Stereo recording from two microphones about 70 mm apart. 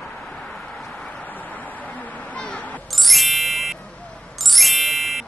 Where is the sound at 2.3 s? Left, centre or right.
Centre.